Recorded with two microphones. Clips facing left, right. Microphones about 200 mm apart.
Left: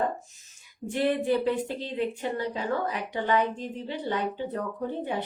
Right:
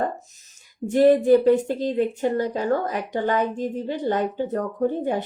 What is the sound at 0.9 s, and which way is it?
A woman's voice, 40° right (ahead or behind).